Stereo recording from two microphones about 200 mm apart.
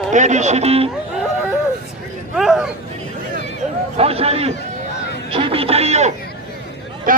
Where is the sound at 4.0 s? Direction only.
30° right (ahead or behind).